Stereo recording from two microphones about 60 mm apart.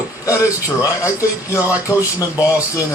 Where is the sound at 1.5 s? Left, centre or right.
Left.